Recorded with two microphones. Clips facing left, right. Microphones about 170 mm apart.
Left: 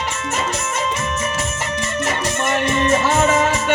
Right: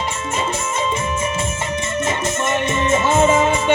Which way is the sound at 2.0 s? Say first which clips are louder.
Even; 25° right (ahead or behind).